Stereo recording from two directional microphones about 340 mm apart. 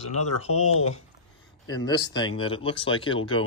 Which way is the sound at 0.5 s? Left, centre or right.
Centre.